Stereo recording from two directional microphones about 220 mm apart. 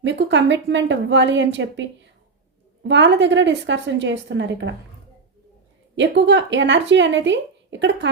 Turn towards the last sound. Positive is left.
turn(degrees=-55)  # may be behind; listen again after turning